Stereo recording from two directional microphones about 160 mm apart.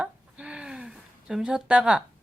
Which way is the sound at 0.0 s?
5° right (ahead or behind).